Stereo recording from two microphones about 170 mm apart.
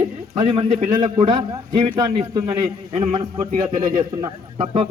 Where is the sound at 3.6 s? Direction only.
25° right (ahead or behind).